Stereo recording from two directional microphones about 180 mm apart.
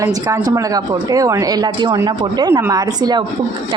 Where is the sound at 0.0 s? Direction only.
15° right (ahead or behind).